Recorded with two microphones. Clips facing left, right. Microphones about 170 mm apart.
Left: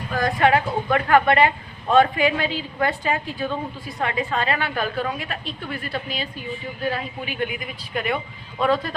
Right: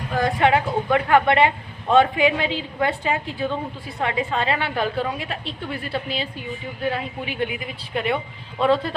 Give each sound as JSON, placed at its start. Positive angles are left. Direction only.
{"t": 0.1, "sound": "speech", "side_deg": -20}